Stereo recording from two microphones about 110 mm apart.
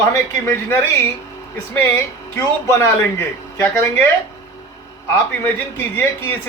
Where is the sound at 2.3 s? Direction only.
25° left (ahead or behind).